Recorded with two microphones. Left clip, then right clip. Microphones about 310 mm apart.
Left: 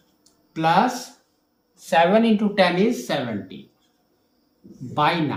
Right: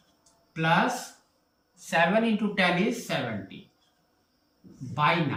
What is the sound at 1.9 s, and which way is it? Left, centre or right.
Speech, centre.